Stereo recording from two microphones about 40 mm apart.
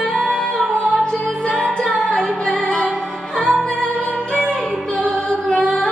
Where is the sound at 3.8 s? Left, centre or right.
Left.